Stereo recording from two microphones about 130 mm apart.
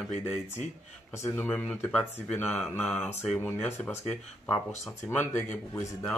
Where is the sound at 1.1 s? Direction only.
15° left (ahead or behind).